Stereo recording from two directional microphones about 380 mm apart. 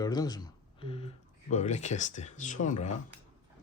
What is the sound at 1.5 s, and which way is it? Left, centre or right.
Speech, centre.